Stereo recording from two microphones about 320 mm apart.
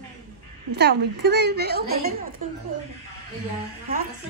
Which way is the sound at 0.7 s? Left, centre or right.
Right.